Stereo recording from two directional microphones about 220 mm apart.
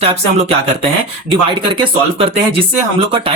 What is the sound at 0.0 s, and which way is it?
Speech, 25° right (ahead or behind).